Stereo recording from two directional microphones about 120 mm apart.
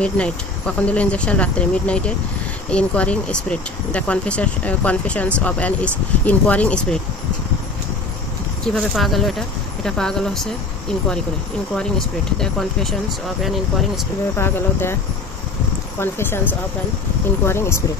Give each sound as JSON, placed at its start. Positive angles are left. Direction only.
{"t": 0.0, "sound": "speech", "side_deg": 10}
{"t": 8.7, "sound": "speech", "side_deg": 0}
{"t": 12.4, "sound": "speech", "side_deg": 5}
{"t": 14.4, "sound": "speech", "side_deg": 20}
{"t": 16.0, "sound": "speech", "side_deg": 20}